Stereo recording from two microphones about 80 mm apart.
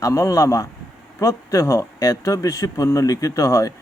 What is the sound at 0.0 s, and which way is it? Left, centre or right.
A man's voice, left.